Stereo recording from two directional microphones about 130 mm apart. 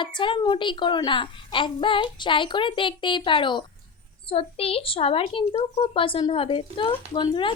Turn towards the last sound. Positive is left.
turn(degrees=40)  # may be behind; listen again after turning